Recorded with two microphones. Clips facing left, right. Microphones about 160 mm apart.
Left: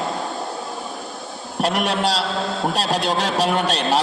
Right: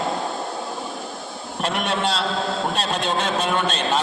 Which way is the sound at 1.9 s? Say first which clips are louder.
Left 1 dB; 35° left (ahead or behind).